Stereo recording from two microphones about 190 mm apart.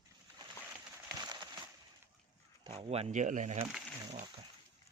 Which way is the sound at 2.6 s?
30° right (ahead or behind).